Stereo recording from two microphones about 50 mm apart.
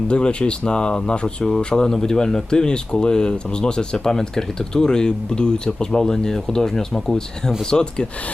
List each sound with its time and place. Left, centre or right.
0.1 s speech: centre